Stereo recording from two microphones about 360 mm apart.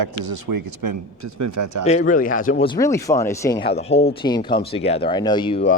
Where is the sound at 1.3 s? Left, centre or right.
Right.